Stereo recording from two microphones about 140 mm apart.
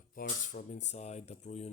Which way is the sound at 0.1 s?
70° left (ahead or behind).